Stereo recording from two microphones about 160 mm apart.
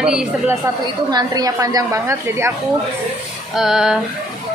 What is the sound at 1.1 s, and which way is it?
A woman's voice, 25° right (ahead or behind).